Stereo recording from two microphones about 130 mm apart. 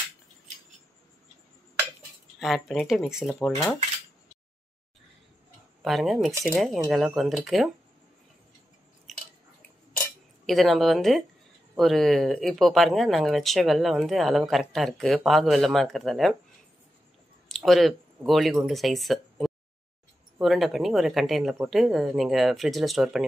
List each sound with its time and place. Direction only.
2.3 s speech: centre (ahead or behind)
3.3 s speech: 15° left (ahead or behind)
5.8 s speech: centre (ahead or behind)
9.9 s cutlery: centre (ahead or behind)
11.7 s speech: centre (ahead or behind)
17.5 s speech: centre (ahead or behind)